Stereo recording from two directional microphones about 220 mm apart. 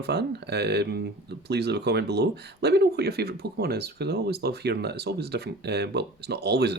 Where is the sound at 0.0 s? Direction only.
50° right (ahead or behind).